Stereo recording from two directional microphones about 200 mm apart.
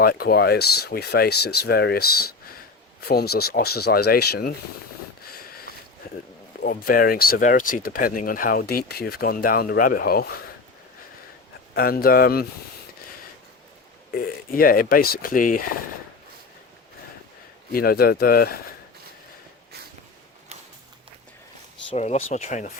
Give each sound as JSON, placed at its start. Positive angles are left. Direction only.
{"t": 0.0, "sound": "speech", "side_deg": 50}
{"t": 6.6, "sound": "speech", "side_deg": 45}
{"t": 11.7, "sound": "speech", "side_deg": 50}
{"t": 14.1, "sound": "speech", "side_deg": 45}
{"t": 17.7, "sound": "speech", "side_deg": 50}
{"t": 21.8, "sound": "speech", "side_deg": 35}